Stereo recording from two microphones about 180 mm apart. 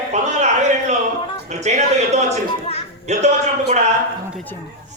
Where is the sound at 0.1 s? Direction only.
40° right (ahead or behind).